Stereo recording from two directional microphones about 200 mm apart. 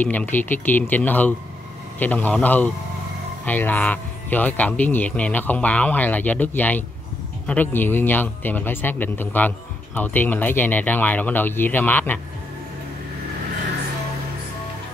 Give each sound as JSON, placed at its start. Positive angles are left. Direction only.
{"t": 0.0, "sound": "speech", "side_deg": 10}